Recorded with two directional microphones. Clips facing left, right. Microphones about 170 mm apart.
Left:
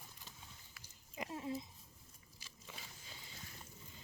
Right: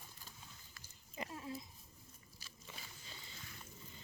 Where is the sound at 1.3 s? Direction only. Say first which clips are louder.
Left 7 dB; 25° left (ahead or behind).